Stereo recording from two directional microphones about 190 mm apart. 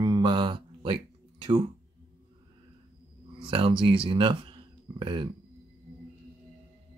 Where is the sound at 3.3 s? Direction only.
30° right (ahead or behind).